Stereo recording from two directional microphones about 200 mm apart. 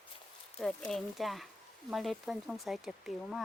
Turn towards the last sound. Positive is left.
turn(degrees=0)  # may be behind; listen again after turning